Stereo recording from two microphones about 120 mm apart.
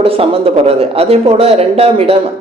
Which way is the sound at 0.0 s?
50° right (ahead or behind).